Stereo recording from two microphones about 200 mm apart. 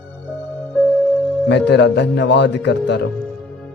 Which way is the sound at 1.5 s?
60° left (ahead or behind).